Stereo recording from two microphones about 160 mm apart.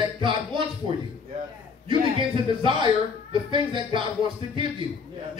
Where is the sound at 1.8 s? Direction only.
30° right (ahead or behind).